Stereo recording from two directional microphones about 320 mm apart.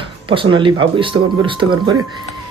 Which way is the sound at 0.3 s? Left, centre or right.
Centre.